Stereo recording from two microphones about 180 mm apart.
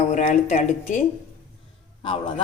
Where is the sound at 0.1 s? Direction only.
40° left (ahead or behind).